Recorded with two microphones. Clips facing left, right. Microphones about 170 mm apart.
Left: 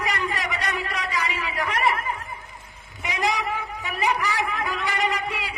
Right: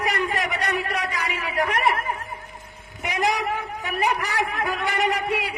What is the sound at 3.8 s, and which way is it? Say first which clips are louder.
A man's voice: even; 50° right (ahead or behind).